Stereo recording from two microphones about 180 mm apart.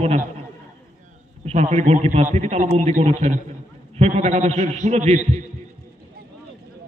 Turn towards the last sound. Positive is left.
turn(degrees=-40)  # may be behind; listen again after turning